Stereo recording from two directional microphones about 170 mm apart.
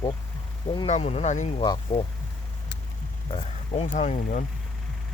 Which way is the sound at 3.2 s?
35° left (ahead or behind).